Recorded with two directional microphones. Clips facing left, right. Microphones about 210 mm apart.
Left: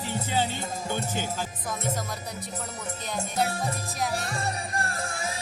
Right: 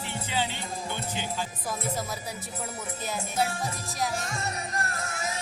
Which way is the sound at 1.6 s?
5° right (ahead or behind).